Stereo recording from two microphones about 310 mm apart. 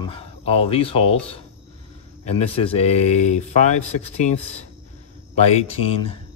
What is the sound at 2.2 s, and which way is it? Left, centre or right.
Speech, centre.